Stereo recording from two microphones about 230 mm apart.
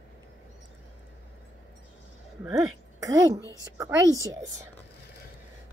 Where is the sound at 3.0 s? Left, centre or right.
Centre.